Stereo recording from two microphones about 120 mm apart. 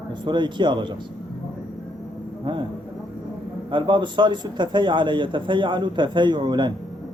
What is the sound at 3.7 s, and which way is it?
A man's voice, 40° right (ahead or behind).